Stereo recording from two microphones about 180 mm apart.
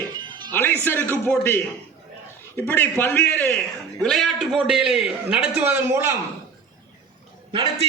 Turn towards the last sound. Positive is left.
turn(degrees=-25)  # may be behind; listen again after turning